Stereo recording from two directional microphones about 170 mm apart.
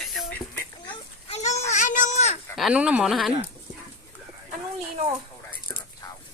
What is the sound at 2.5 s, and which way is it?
Speech, 5° right (ahead or behind).